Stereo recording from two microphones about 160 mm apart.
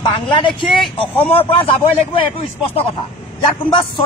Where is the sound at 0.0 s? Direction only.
30° left (ahead or behind).